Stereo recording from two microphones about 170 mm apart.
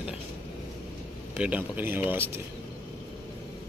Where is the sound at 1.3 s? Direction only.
5° right (ahead or behind).